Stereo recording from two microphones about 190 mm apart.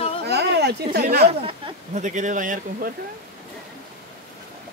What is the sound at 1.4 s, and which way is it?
Speech, 30° right (ahead or behind).